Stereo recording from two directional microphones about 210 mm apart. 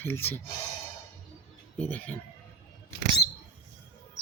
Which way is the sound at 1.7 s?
5° left (ahead or behind).